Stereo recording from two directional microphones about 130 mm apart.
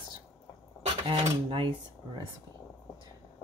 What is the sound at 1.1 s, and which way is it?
Speech, 40° right (ahead or behind).